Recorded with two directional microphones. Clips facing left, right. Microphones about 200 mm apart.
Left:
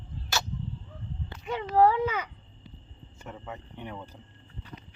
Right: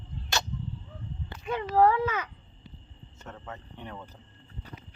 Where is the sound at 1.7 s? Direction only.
10° left (ahead or behind).